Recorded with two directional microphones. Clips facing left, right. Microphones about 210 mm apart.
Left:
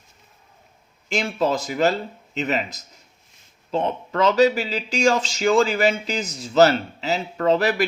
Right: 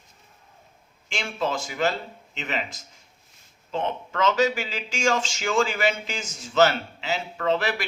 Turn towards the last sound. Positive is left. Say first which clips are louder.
# left 6 dB
turn(degrees=40)  # may be behind; listen again after turning